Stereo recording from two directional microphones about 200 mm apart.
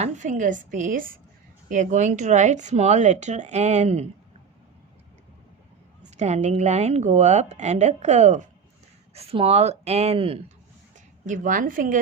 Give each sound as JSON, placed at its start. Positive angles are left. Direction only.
{"t": 0.0, "sound": "a woman's voice", "side_deg": -40}
{"t": 6.1, "sound": "a woman's voice", "side_deg": -35}
{"t": 11.3, "sound": "a woman's voice", "side_deg": -40}